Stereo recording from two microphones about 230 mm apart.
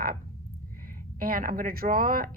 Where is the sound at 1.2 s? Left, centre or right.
Right.